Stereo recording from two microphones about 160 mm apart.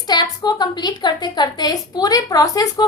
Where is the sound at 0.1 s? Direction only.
25° left (ahead or behind).